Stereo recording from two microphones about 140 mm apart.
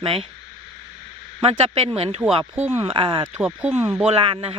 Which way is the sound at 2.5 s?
15° right (ahead or behind).